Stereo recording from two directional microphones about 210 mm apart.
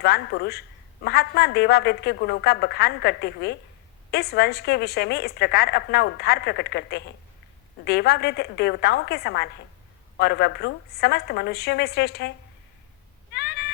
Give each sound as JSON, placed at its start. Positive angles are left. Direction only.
{"t": 0.0, "sound": "a woman's voice", "side_deg": 50}
{"t": 13.3, "sound": "meow", "side_deg": 50}